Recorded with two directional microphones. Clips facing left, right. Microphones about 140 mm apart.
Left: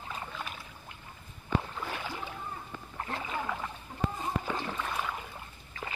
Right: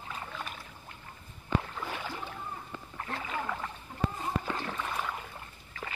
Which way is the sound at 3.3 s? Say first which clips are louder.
Even; 5° left (ahead or behind).